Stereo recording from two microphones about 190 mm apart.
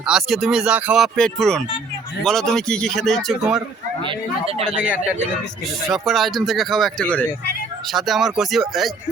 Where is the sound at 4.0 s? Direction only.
30° right (ahead or behind).